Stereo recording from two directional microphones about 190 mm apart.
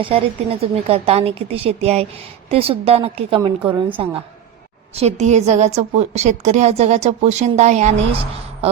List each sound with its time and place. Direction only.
0.0 s a woman's voice: 30° right (ahead or behind)